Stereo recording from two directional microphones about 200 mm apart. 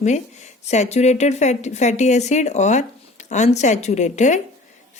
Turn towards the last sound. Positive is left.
turn(degrees=35)  # may be behind; listen again after turning